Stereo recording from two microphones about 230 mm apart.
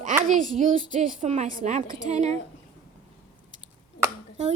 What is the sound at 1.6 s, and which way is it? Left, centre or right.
Speech, right.